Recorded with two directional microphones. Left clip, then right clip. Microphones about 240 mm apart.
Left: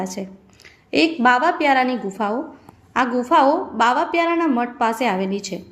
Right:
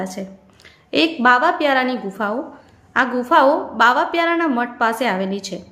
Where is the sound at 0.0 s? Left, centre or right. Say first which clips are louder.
Even; centre.